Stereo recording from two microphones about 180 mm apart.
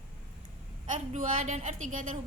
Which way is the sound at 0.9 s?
45° right (ahead or behind).